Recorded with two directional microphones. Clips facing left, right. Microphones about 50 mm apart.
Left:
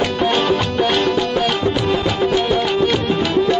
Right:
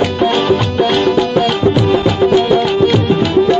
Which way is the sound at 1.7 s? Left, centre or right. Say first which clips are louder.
Right 6 dB; right.